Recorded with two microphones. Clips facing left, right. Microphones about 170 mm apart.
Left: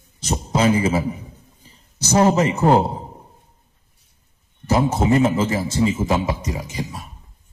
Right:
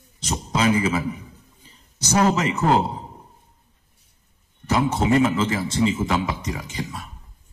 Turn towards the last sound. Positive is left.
turn(degrees=20)  # may be behind; listen again after turning